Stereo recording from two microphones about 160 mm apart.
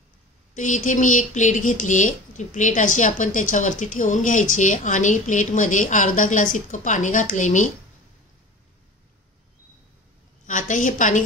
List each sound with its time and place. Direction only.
0.6 s speech: 50° left (ahead or behind)
10.4 s speech: 55° left (ahead or behind)